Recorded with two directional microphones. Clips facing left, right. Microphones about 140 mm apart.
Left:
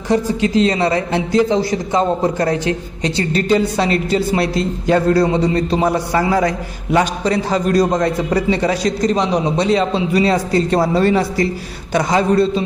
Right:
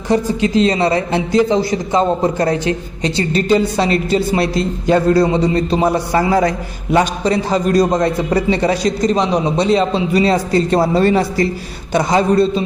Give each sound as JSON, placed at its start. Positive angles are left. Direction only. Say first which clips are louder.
{"t": 0.1, "sound": "speech", "louder": "right 1 dB", "side_deg": -25}